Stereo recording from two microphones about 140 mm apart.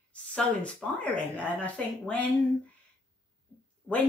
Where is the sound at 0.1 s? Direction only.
10° left (ahead or behind).